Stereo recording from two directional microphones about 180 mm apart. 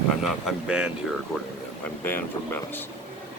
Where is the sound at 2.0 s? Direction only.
10° left (ahead or behind).